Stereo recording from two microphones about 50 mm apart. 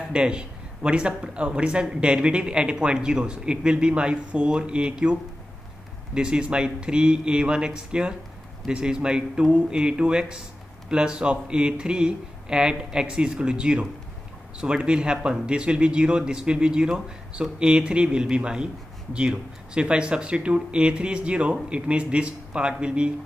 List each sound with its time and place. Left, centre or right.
0.1 s a man's voice: centre